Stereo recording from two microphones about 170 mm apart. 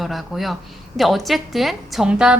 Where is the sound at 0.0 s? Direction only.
Centre (ahead or behind).